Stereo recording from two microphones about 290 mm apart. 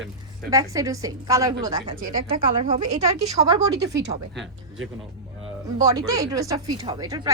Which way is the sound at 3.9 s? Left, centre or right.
Right.